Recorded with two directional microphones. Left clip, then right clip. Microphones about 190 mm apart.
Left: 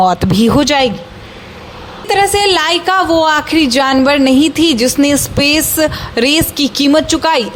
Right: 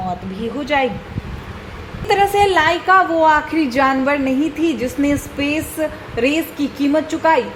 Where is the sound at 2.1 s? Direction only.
15° left (ahead or behind).